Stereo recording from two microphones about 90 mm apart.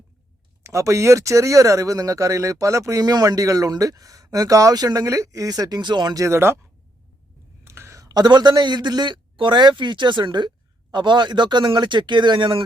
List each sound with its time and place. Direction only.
0.6 s speech: 35° right (ahead or behind); by 6.1 s 55° right (ahead or behind)
6.1 s speech: 30° right (ahead or behind)
7.6 s a man's voice: 30° right (ahead or behind); by 12.6 s 65° right (ahead or behind)